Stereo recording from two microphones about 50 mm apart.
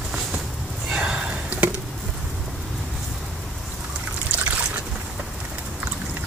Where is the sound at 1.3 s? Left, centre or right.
Right.